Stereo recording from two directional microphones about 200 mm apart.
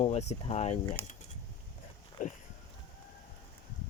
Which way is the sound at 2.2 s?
40° left (ahead or behind).